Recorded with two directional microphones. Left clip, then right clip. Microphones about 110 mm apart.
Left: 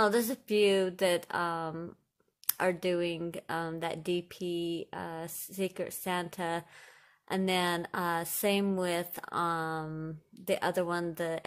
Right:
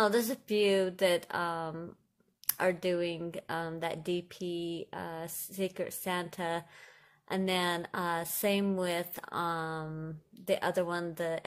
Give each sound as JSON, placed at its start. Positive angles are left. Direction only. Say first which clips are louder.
{"t": 0.0, "sound": "a woman's voice", "louder": "left 1 dB", "side_deg": 30}